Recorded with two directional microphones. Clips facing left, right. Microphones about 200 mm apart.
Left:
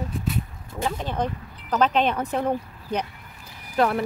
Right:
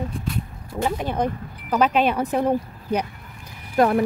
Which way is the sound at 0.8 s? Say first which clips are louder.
Right 3 dB; 10° right (ahead or behind).